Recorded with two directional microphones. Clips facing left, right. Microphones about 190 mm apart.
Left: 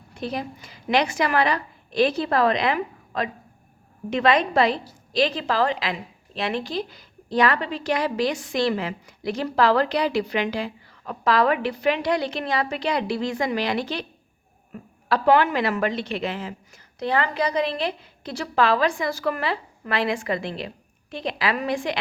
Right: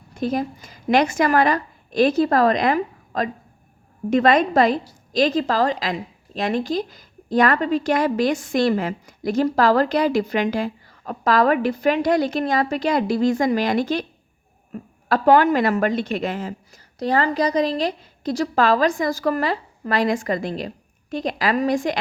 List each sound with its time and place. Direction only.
0.1 s a woman's voice: 45° right (ahead or behind)